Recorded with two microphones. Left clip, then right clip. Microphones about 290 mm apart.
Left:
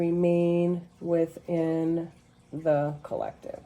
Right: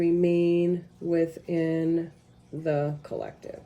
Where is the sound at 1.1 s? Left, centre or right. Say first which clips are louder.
Even; left.